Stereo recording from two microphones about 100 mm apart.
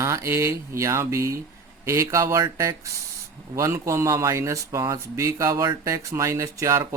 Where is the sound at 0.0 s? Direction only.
30° right (ahead or behind).